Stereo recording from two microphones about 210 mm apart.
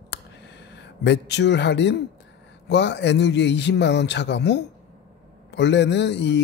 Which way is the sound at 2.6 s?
55° left (ahead or behind).